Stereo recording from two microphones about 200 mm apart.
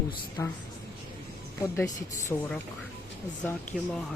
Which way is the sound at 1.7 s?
10° left (ahead or behind).